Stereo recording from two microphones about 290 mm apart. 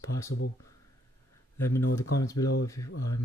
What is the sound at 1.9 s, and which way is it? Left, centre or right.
Speech, centre.